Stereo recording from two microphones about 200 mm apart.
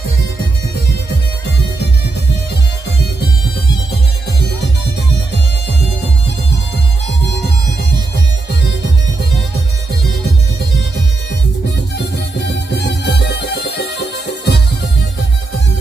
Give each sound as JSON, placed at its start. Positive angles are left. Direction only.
{"t": 12.0, "sound": "music", "side_deg": 60}